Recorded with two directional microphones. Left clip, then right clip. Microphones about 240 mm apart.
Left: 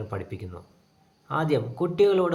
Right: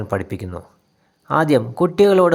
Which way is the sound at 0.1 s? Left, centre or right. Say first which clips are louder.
Right 11 dB; right.